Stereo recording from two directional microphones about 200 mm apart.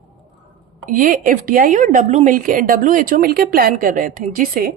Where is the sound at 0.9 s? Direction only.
45° right (ahead or behind).